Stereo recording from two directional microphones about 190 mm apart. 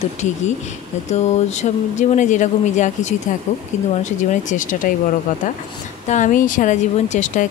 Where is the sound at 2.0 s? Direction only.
40° left (ahead or behind).